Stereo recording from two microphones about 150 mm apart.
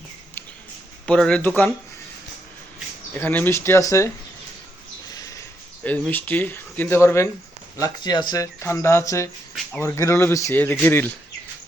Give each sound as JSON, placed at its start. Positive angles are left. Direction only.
{"t": 1.0, "sound": "speech", "side_deg": 5}
{"t": 3.2, "sound": "speech", "side_deg": 10}
{"t": 5.0, "sound": "a sound", "side_deg": 25}
{"t": 5.8, "sound": "speech", "side_deg": 10}